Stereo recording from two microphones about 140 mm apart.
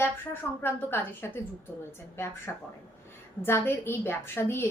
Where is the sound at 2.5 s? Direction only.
15° left (ahead or behind).